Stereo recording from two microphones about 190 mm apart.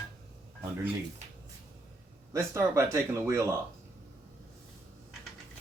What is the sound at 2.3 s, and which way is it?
Speech, 15° right (ahead or behind).